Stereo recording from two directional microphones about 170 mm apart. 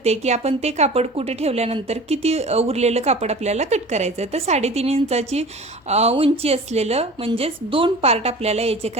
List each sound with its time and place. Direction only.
0.0 s a woman's voice: 40° right (ahead or behind)